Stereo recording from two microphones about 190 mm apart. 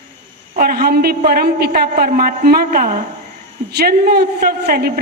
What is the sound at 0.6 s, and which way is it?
A woman's voice, 50° right (ahead or behind).